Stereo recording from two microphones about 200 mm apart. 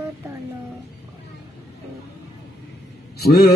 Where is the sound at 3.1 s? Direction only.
50° left (ahead or behind).